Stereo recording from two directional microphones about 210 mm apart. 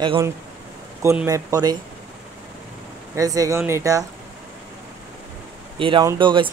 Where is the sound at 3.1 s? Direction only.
15° right (ahead or behind).